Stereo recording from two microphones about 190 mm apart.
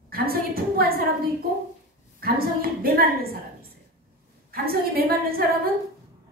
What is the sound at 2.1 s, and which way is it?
Speech, 50° right (ahead or behind).